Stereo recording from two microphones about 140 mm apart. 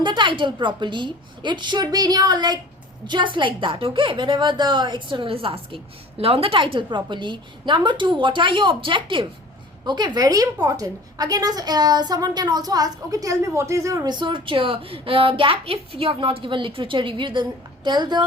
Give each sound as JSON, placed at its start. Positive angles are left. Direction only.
{"t": 0.0, "sound": "a woman's voice", "side_deg": -35}